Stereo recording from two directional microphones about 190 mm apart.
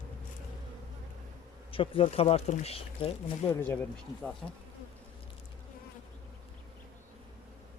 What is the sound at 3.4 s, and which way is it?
Speech, 15° left (ahead or behind).